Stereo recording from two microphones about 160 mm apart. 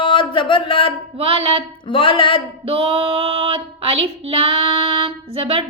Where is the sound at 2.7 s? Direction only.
40° right (ahead or behind).